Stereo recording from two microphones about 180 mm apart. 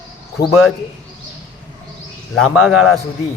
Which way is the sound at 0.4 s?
60° left (ahead or behind).